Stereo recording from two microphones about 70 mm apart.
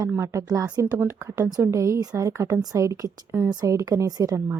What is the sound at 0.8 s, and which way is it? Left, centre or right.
A woman's voice, right.